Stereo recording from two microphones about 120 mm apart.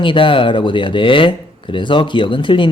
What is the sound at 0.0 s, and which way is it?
Speech, 45° left (ahead or behind).